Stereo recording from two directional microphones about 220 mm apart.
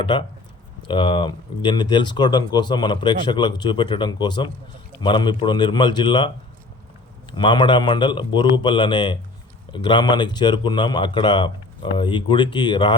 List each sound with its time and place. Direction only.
0.0 s speech: 20° left (ahead or behind)